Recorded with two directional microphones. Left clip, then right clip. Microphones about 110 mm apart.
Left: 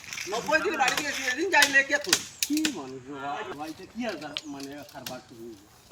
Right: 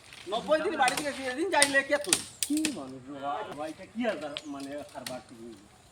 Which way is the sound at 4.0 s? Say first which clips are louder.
Right 2 dB; 15° right (ahead or behind).